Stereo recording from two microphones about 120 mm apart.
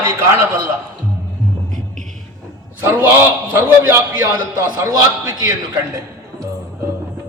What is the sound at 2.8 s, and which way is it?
A man's voice, 15° right (ahead or behind).